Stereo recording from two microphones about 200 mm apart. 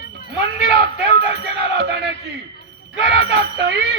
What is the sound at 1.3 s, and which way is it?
Music, 60° right (ahead or behind).